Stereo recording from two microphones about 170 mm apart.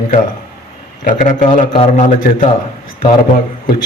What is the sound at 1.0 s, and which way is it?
A man's voice, 50° left (ahead or behind).